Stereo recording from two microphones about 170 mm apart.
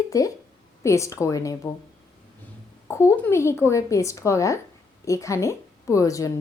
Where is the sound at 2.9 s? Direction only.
15° left (ahead or behind).